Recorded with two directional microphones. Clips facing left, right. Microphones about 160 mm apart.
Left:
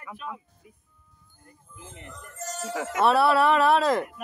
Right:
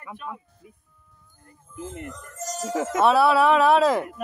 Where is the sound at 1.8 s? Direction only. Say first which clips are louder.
Right 9 dB; 45° right (ahead or behind).